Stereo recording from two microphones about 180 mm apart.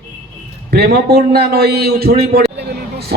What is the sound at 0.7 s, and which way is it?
Speech, 60° right (ahead or behind).